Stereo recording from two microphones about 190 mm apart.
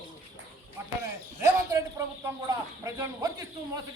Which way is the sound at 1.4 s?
15° right (ahead or behind).